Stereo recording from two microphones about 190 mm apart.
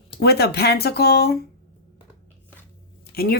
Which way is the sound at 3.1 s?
55° left (ahead or behind).